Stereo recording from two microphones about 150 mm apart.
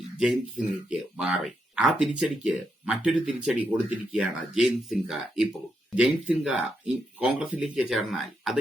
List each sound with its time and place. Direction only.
0.2 s speech: 5° right (ahead or behind)